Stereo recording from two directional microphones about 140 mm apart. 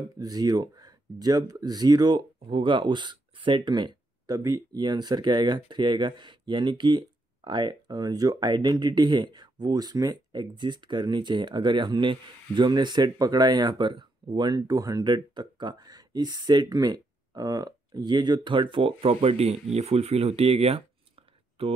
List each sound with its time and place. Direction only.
0.2 s speech: 25° right (ahead or behind); by 20.8 s 45° right (ahead or behind)